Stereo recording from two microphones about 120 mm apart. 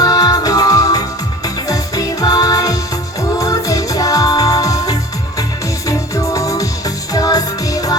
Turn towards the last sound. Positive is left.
turn(degrees=30)  # may be behind; listen again after turning